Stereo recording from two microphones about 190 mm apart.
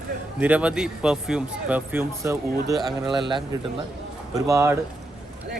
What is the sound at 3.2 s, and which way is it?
A man's voice, 25° right (ahead or behind).